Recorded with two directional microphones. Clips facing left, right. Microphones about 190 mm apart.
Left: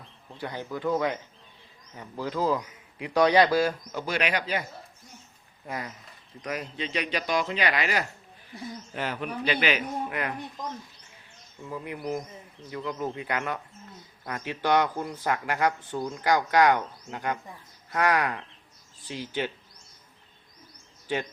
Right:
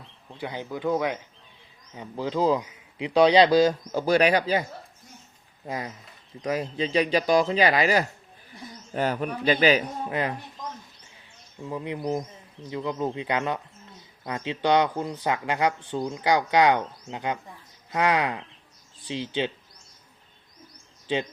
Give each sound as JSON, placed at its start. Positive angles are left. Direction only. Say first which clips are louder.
{"t": 0.3, "sound": "speech", "louder": "right 1 dB", "side_deg": -15}
{"t": 3.9, "sound": "speech", "louder": "right 8 dB", "side_deg": -35}
{"t": 5.6, "sound": "speech", "louder": "right 3 dB", "side_deg": -25}
{"t": 11.6, "sound": "speech", "louder": "right 4 dB", "side_deg": -20}